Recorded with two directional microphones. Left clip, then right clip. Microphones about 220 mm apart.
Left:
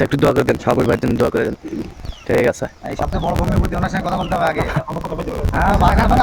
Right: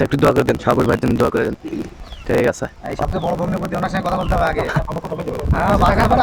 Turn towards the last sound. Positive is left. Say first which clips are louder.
# right 1 dB
turn(degrees=-20)  # may be behind; listen again after turning